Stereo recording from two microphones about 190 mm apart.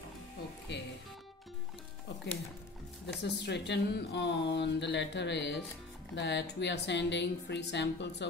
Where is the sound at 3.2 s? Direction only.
65° left (ahead or behind).